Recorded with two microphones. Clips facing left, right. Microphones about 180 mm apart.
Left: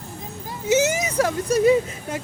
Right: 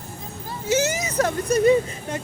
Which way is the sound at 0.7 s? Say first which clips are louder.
Left 3 dB; 20° left (ahead or behind).